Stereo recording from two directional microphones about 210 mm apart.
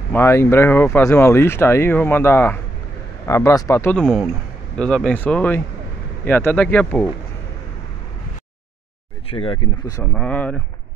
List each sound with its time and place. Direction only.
0.1 s speech: 10° left (ahead or behind)
9.3 s speech: 25° left (ahead or behind)
10.1 s speech: 5° left (ahead or behind)